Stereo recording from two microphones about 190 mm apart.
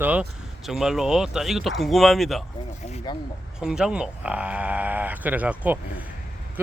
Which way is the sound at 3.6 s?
5° right (ahead or behind).